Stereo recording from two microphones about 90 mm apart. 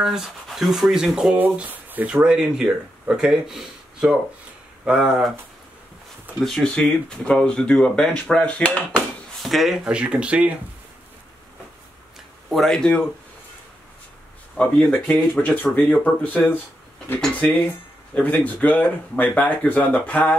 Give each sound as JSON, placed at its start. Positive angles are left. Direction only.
{"t": 0.0, "sound": "speech", "side_deg": -5}
{"t": 1.4, "sound": "speech", "side_deg": -20}
{"t": 6.4, "sound": "speech", "side_deg": 5}
{"t": 8.9, "sound": "speech", "side_deg": 0}
{"t": 12.5, "sound": "speech", "side_deg": 5}
{"t": 14.6, "sound": "speech", "side_deg": 10}
{"t": 18.1, "sound": "speech", "side_deg": 15}